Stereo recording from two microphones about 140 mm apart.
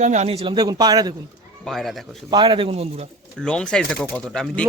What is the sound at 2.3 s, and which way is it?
Speech, 35° right (ahead or behind).